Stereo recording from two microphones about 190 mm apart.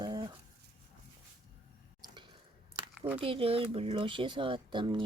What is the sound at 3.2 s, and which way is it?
Speech, 30° right (ahead or behind).